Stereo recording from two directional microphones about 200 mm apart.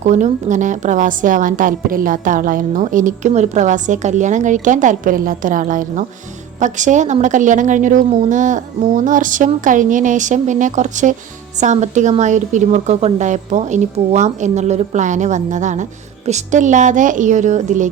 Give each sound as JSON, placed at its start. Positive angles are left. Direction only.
{"t": 0.0, "sound": "a woman's voice", "side_deg": -35}